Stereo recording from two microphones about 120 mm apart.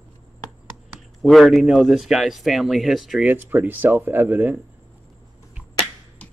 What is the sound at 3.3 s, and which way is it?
Speech, 15° right (ahead or behind).